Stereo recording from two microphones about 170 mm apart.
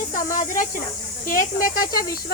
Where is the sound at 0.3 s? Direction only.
50° left (ahead or behind).